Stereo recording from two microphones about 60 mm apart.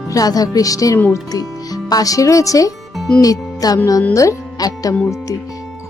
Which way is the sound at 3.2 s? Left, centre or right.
Left.